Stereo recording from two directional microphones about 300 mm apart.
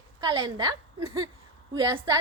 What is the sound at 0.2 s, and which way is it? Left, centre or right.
A woman's voice, centre.